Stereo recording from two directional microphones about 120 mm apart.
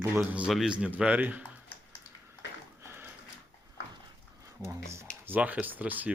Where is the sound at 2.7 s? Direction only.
20° right (ahead or behind).